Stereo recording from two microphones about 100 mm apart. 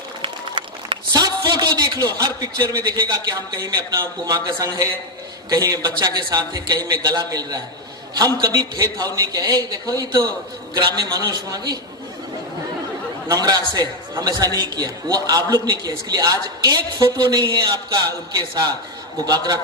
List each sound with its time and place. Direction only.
0.2 s run: 60° right (ahead or behind)
1.1 s a sound: 40° right (ahead or behind)
2.7 s a man's voice: 40° right (ahead or behind)
13.2 s a man's voice: 35° right (ahead or behind)